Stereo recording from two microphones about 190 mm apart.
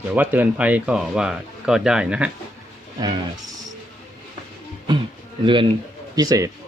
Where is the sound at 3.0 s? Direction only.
20° right (ahead or behind).